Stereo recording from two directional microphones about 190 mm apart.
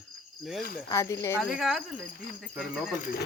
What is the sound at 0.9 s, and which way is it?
Speech, 15° left (ahead or behind).